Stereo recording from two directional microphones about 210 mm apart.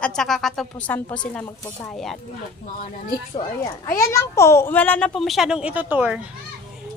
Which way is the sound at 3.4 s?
15° left (ahead or behind).